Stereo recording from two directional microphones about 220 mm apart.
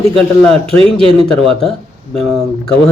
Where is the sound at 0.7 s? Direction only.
25° right (ahead or behind).